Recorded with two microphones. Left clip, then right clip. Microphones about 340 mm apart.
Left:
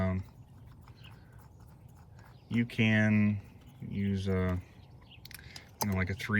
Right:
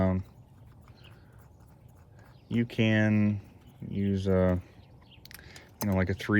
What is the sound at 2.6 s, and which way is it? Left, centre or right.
Coin, centre.